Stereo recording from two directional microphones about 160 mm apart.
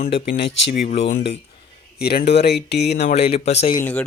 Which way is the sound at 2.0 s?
90° left.